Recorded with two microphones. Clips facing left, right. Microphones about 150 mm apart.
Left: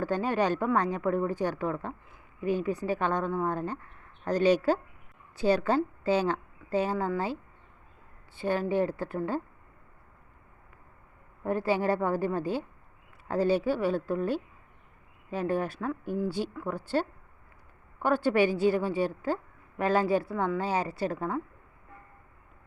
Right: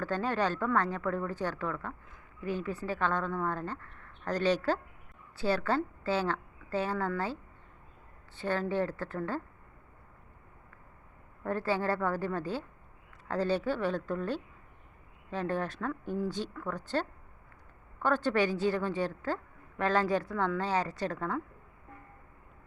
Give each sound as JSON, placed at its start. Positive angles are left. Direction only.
{"t": 0.0, "sound": "a woman's voice", "side_deg": 15}
{"t": 8.4, "sound": "a woman's voice", "side_deg": 15}
{"t": 11.4, "sound": "a woman's voice", "side_deg": 15}